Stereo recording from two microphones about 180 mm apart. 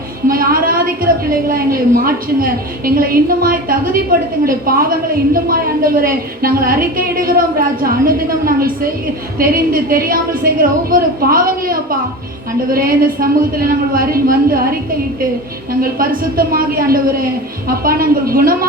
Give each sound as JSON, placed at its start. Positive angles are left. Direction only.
{"t": 0.3, "sound": "a woman's voice", "side_deg": -55}
{"t": 15.8, "sound": "a woman's voice", "side_deg": -55}